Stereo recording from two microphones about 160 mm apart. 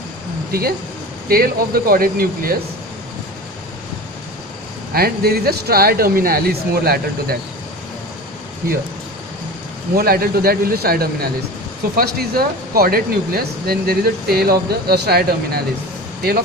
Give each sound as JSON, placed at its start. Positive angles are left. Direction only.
{"t": 1.3, "sound": "speech", "side_deg": -70}
{"t": 4.9, "sound": "speech", "side_deg": -70}
{"t": 9.9, "sound": "speech", "side_deg": -65}